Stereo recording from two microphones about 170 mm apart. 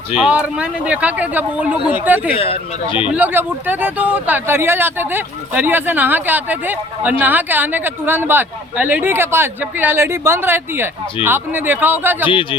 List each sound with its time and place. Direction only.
0.2 s speech: 5° right (ahead or behind)
2.3 s speech: 35° left (ahead or behind)
3.1 s speech: 10° right (ahead or behind)
12.3 s a man's voice: 30° left (ahead or behind)